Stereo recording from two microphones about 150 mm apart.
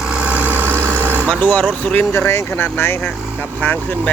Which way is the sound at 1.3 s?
10° left (ahead or behind).